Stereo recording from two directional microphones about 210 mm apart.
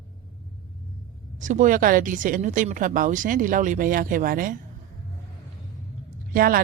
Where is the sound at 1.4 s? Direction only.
35° right (ahead or behind).